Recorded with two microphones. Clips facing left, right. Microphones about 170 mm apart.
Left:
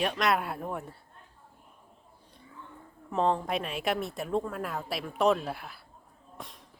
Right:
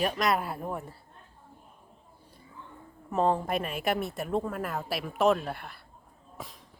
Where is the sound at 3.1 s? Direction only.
5° right (ahead or behind).